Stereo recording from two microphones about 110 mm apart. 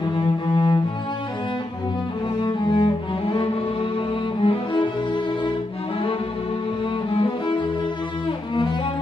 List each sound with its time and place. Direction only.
0.1 s cello: 45° left (ahead or behind)
2.4 s cello: 45° left (ahead or behind)
7.1 s music: 50° left (ahead or behind)